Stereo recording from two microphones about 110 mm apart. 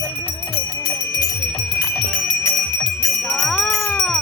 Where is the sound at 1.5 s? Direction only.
Centre (ahead or behind).